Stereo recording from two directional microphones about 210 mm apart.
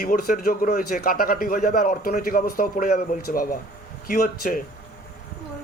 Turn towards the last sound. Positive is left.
turn(degrees=45)  # may be behind; listen again after turning